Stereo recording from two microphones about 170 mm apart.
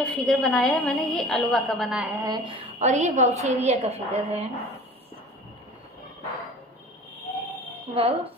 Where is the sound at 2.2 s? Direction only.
25° right (ahead or behind).